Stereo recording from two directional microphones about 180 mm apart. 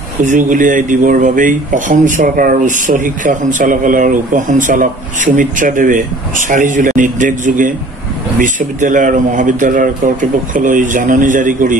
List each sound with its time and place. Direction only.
0.2 s a man's voice: 45° right (ahead or behind)